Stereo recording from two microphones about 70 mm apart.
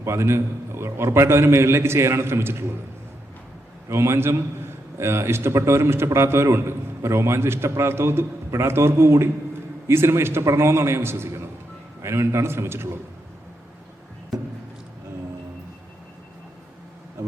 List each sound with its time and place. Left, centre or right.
0.0 s a man's voice: right
3.8 s a man's voice: right